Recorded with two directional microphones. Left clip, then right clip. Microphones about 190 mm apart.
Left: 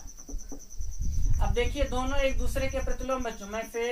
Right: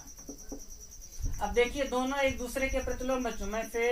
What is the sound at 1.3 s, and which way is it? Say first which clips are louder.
Speech: right 2 dB; centre (ahead or behind).